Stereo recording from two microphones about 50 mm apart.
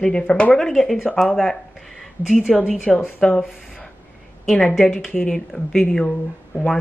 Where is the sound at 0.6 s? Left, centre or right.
Centre.